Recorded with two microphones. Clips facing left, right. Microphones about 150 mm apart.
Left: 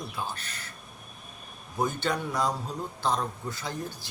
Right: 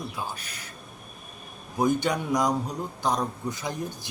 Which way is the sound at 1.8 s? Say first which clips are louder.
Right 4 dB; 15° right (ahead or behind).